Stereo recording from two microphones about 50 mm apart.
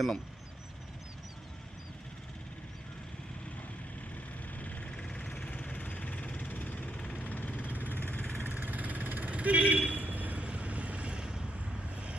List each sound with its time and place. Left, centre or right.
4.5 s vehicle: left
8.4 s vehicle: right
10.0 s a sound: right; by 11.4 s centre